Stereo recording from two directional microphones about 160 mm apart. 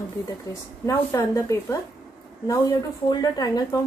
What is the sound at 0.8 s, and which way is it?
Speech, 20° left (ahead or behind).